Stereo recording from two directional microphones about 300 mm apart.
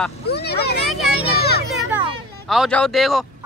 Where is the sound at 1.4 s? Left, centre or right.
Left.